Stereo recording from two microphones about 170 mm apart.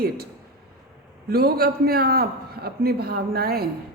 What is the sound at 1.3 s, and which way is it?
Speech, 65° right (ahead or behind).